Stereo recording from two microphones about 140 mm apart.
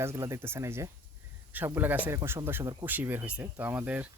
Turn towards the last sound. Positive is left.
turn(degrees=-10)  # may be behind; listen again after turning